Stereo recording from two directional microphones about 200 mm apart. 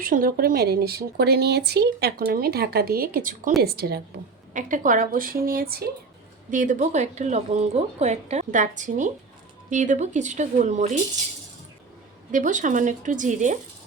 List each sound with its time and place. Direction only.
0.0 s speech: 45° right (ahead or behind)
4.5 s a woman's voice: 40° right (ahead or behind)
12.3 s a woman's voice: 40° right (ahead or behind)